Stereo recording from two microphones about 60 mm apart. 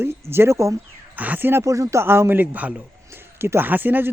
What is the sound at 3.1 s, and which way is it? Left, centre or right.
Speech, right.